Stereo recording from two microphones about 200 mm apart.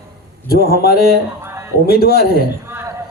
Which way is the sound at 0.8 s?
50° left (ahead or behind).